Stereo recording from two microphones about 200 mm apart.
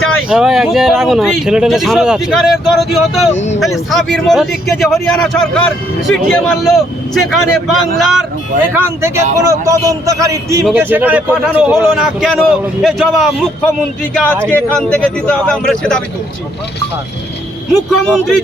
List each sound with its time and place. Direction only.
0.3 s speech: centre (ahead or behind)
3.3 s speech: 35° left (ahead or behind)
3.6 s speech: centre (ahead or behind)
8.7 s speech: 10° right (ahead or behind); by 16.0 s 5° left (ahead or behind)
18.0 s speech: centre (ahead or behind)